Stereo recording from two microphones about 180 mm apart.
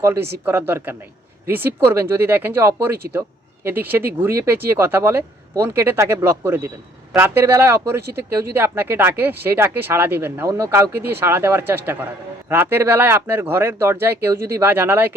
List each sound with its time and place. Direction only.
0.0 s speech: 15° right (ahead or behind)